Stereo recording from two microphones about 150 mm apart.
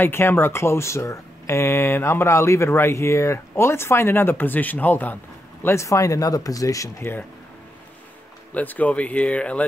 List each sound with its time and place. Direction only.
0.0 s speech: 15° left (ahead or behind)
8.5 s speech: 10° left (ahead or behind)